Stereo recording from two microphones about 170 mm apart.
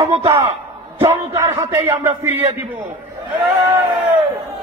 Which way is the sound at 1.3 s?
15° right (ahead or behind).